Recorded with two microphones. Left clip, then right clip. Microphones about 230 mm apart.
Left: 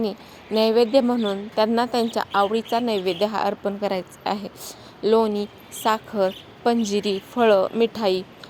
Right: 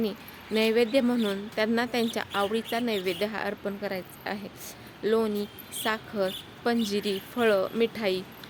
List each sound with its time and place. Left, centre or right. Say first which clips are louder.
0.0 s a woman's voice: left 4 dB; centre
3.8 s a woman's voice: left 8 dB; left